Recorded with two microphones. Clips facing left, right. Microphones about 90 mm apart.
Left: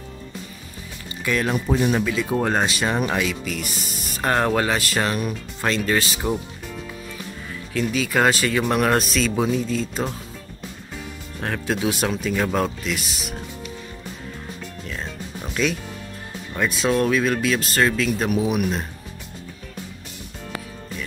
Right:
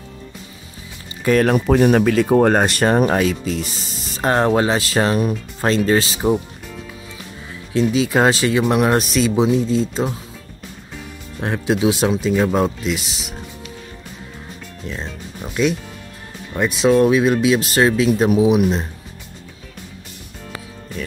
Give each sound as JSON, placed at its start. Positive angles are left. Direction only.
{"t": 1.2, "sound": "speech", "side_deg": -45}
{"t": 7.8, "sound": "speech", "side_deg": -25}
{"t": 8.5, "sound": "speech", "side_deg": -15}
{"t": 11.4, "sound": "speech", "side_deg": -20}
{"t": 15.4, "sound": "music", "side_deg": -5}
{"t": 16.5, "sound": "speech", "side_deg": -20}